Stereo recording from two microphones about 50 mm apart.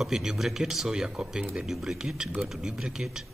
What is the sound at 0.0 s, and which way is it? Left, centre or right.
Speech, centre.